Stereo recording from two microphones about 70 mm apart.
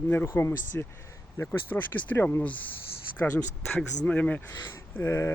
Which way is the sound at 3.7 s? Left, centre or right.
Centre.